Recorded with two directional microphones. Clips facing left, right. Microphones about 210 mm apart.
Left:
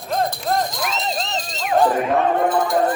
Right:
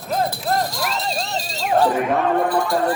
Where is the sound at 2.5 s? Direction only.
20° left (ahead or behind).